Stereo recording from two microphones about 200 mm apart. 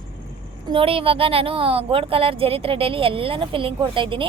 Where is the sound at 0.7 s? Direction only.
25° right (ahead or behind).